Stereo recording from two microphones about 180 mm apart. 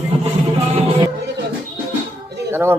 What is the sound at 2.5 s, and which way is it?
Speech, 15° right (ahead or behind).